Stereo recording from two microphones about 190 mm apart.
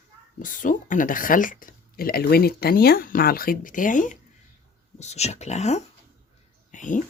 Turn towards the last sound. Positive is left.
turn(degrees=40)  # may be behind; listen again after turning